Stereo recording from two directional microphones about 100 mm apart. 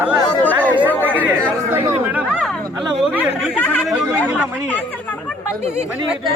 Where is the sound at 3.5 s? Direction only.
15° left (ahead or behind).